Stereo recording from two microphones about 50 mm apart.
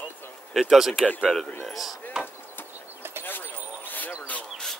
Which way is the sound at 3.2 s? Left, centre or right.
Left.